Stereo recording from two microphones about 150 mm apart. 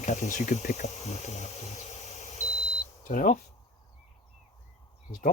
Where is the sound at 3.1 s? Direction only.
60° left (ahead or behind).